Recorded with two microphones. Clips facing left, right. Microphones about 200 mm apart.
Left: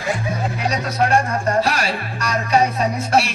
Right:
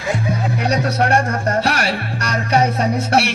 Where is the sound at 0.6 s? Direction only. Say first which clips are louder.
Right 3 dB; 70° right (ahead or behind).